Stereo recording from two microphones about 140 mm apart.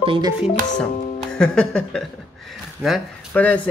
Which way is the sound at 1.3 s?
5° left (ahead or behind).